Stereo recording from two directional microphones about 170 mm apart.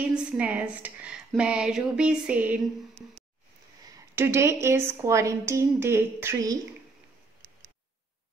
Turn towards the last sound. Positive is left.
turn(degrees=-20)  # may be behind; listen again after turning